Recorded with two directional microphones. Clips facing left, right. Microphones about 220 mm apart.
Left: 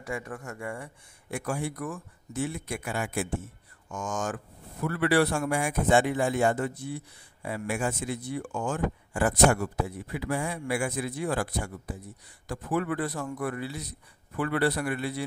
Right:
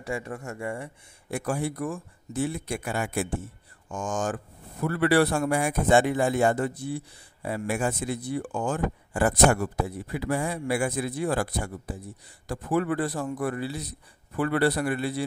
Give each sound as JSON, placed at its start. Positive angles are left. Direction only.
{"t": 0.0, "sound": "speech", "side_deg": -25}
{"t": 1.3, "sound": "speech", "side_deg": -35}